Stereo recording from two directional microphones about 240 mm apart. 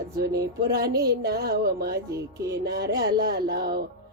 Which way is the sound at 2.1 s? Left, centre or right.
Centre.